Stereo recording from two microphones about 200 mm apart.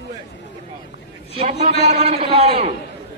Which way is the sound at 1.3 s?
30° right (ahead or behind).